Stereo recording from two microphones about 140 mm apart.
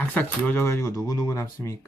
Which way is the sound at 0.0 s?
10° left (ahead or behind).